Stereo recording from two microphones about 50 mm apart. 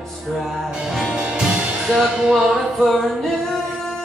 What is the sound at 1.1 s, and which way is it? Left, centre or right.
Music, centre.